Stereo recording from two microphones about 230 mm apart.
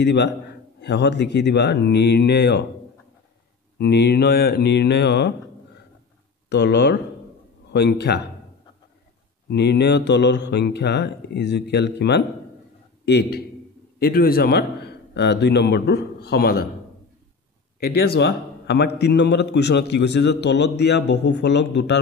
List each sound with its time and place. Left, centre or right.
0.0 s a man's voice: left
3.7 s a man's voice: left
6.5 s a man's voice: left
9.5 s a man's voice: left
17.7 s a man's voice: left